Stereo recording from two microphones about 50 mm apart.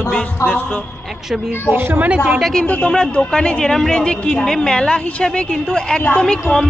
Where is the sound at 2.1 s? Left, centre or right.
Right.